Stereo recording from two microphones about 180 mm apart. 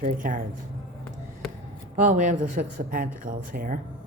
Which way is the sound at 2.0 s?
45° right (ahead or behind).